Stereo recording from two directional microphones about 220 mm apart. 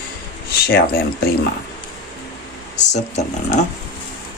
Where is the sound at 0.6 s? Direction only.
45° left (ahead or behind).